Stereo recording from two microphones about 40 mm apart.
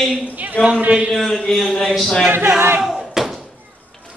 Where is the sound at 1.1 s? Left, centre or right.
Centre.